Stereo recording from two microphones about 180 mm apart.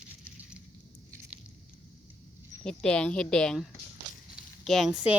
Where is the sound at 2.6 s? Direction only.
5° left (ahead or behind).